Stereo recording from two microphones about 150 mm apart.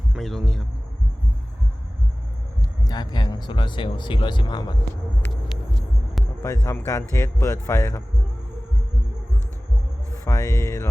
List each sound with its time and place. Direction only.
0.1 s music: centre (ahead or behind)
2.6 s speech: 25° left (ahead or behind)
6.4 s speech: 15° left (ahead or behind)
10.2 s a sound: 20° left (ahead or behind)